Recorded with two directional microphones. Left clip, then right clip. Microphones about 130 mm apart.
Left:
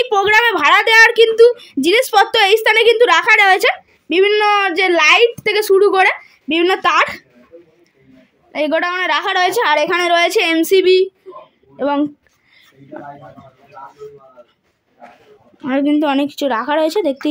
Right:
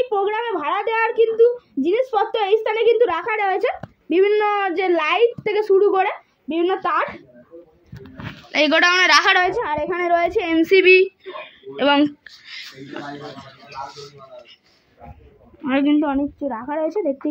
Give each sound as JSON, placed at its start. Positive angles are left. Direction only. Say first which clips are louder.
{"t": 0.0, "sound": "a woman's voice", "louder": "left 9 dB", "side_deg": 45}
{"t": 6.5, "sound": "a woman's voice", "louder": "left 6 dB", "side_deg": 60}
{"t": 8.5, "sound": "speech", "louder": "right 1 dB", "side_deg": 20}
{"t": 9.2, "sound": "a woman's voice", "louder": "left 2 dB", "side_deg": 45}
{"t": 9.8, "sound": "speech", "louder": "left 5 dB", "side_deg": 35}
{"t": 15.6, "sound": "speech", "louder": "left 3 dB", "side_deg": 60}